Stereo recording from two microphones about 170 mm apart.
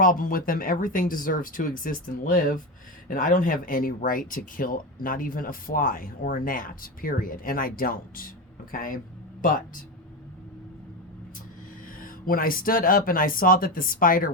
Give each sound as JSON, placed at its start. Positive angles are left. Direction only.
{"t": 0.0, "sound": "speech", "side_deg": 55}
{"t": 11.9, "sound": "speech", "side_deg": 55}